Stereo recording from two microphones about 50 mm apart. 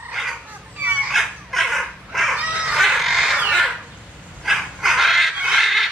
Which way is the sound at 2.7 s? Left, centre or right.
Centre.